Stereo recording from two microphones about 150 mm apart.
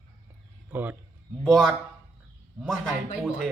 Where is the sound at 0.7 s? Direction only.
10° right (ahead or behind).